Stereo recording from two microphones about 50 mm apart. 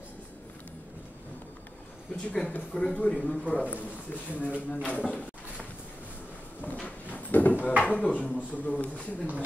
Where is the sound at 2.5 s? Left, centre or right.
Left.